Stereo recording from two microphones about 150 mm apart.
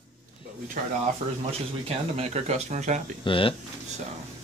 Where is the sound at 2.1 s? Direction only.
45° right (ahead or behind).